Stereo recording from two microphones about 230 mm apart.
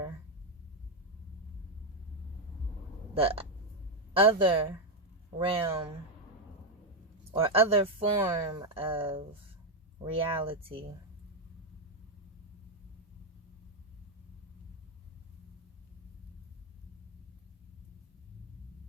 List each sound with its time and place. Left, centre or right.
3.2 s speech: right
7.3 s speech: right